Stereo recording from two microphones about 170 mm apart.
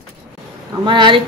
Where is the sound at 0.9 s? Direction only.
30° right (ahead or behind).